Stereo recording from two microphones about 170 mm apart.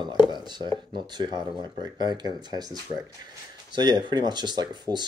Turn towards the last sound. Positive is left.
turn(degrees=-25)  # may be behind; listen again after turning